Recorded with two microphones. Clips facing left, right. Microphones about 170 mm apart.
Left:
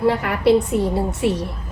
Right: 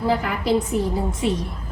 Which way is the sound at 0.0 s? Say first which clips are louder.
Left 5 dB; 65° left (ahead or behind).